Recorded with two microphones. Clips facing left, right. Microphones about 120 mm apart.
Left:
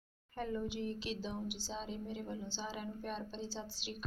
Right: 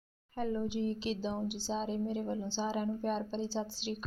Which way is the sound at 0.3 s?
20° right (ahead or behind).